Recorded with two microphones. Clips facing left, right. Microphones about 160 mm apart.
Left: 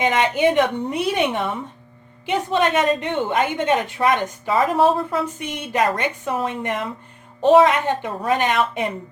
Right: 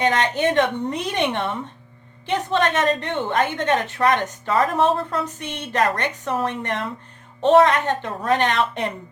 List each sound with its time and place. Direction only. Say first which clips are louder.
0.0 s a woman's voice: left 2 dB; 10° left (ahead or behind)